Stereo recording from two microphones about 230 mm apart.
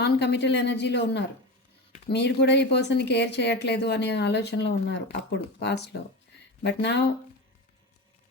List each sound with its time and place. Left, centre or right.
0.0 s speech: left